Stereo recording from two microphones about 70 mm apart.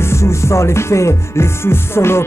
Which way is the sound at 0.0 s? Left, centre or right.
Left.